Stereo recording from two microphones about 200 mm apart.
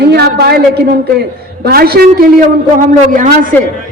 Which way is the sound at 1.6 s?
50° right (ahead or behind).